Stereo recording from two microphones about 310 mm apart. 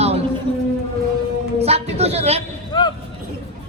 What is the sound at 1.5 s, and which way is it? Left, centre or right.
Speech, centre.